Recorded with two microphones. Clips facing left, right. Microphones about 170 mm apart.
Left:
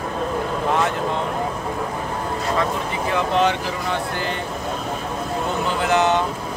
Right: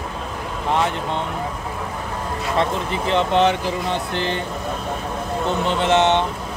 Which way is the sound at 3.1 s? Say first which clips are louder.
Right 2 dB; 25° right (ahead or behind).